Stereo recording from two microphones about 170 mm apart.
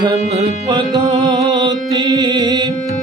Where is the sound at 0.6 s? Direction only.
25° right (ahead or behind).